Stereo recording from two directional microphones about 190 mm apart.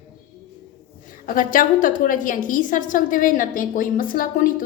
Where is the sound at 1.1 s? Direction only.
45° left (ahead or behind).